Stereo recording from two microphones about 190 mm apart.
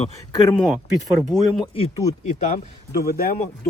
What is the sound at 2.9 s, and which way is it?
Speech, 50° left (ahead or behind).